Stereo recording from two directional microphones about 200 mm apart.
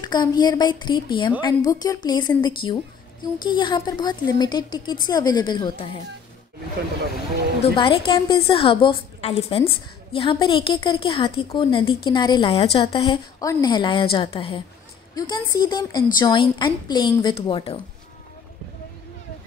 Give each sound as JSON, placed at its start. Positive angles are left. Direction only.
{"t": 0.0, "sound": "a woman's voice", "side_deg": 20}
{"t": 7.6, "sound": "a woman's voice", "side_deg": 25}